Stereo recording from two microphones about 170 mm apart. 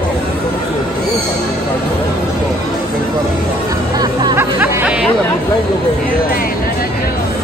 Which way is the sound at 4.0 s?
25° right (ahead or behind).